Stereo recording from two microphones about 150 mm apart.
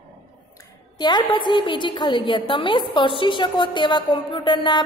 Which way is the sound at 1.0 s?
30° left (ahead or behind).